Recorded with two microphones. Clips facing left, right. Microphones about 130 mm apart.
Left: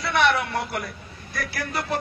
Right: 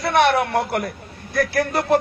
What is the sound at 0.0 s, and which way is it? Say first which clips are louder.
A man's voice: right 5 dB; 55° right (ahead or behind).